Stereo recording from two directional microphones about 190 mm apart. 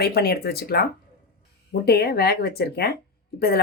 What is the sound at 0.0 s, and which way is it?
Speech, 55° left (ahead or behind).